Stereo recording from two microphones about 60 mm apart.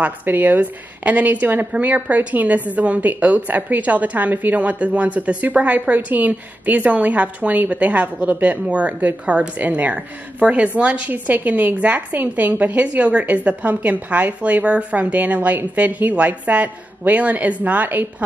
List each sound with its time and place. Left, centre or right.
0.0 s a woman's voice: right